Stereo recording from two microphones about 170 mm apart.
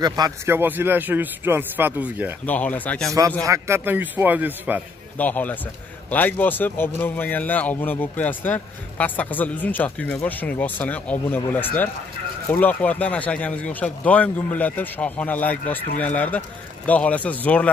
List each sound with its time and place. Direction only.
0.0 s speech: 25° right (ahead or behind)
0.6 s speech: 10° right (ahead or behind)
2.4 s speech: 10° left (ahead or behind)
3.4 s speech: 15° right (ahead or behind)
5.1 s speech: 10° left (ahead or behind)